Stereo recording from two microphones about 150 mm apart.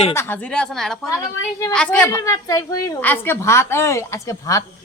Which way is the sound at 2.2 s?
20° left (ahead or behind).